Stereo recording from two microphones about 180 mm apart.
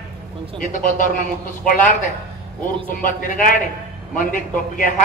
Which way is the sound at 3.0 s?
50° left (ahead or behind).